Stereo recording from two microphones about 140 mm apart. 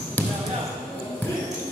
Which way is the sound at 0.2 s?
10° left (ahead or behind).